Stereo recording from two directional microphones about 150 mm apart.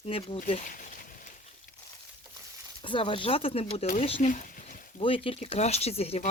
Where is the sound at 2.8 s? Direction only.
35° left (ahead or behind).